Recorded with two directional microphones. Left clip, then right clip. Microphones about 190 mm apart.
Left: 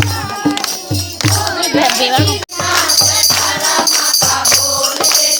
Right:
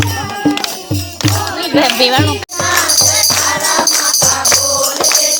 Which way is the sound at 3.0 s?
25° left (ahead or behind).